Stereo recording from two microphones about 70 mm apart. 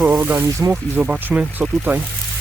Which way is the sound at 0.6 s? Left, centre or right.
Right.